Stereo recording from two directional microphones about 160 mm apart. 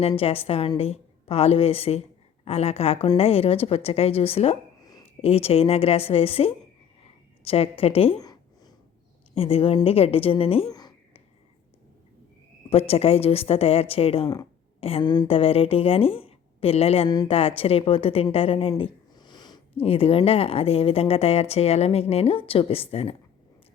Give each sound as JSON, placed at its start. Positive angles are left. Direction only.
{"t": 0.2, "sound": "a woman's voice", "side_deg": 35}
{"t": 8.2, "sound": "a sound", "side_deg": 25}
{"t": 9.3, "sound": "a woman's voice", "side_deg": 35}
{"t": 10.7, "sound": "a sound", "side_deg": 25}
{"t": 12.7, "sound": "a woman's voice", "side_deg": 40}
{"t": 15.0, "sound": "a woman's voice", "side_deg": 25}
{"t": 17.1, "sound": "a woman's voice", "side_deg": 25}
{"t": 17.3, "sound": "a woman's voice", "side_deg": 35}